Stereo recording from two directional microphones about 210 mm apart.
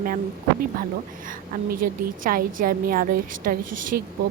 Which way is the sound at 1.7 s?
40° right (ahead or behind).